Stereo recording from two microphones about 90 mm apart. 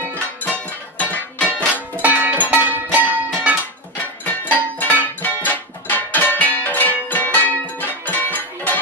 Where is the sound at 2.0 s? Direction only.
20° right (ahead or behind).